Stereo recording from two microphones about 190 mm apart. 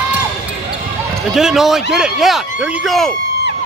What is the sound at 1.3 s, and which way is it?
Speech, centre (ahead or behind).